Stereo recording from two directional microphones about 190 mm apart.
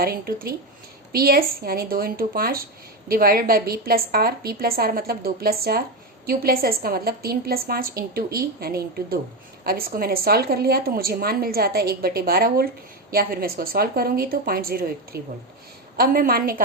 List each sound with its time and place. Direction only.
0.0 s a woman's voice: 50° right (ahead or behind)